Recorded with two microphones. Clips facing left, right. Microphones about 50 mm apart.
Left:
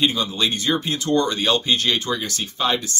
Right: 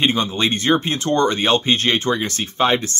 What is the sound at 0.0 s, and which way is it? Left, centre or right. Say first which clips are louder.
Speech: right 2 dB; right.